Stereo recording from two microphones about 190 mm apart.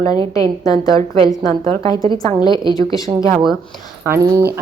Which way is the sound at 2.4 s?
20° left (ahead or behind).